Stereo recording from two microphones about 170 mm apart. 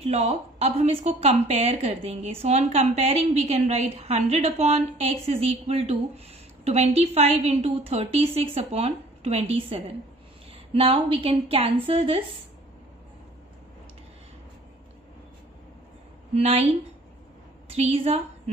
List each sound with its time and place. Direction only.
0.0 s a woman's voice: 40° right (ahead or behind)
16.3 s a woman's voice: 35° right (ahead or behind)
17.7 s a woman's voice: 35° right (ahead or behind)